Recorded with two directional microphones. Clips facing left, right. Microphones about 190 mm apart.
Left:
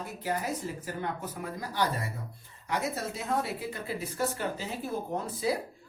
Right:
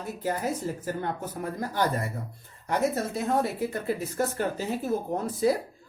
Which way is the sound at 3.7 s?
50° right (ahead or behind).